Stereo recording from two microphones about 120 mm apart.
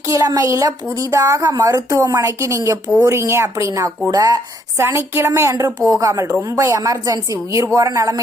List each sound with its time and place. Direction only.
0.0 s a woman's voice: 25° right (ahead or behind)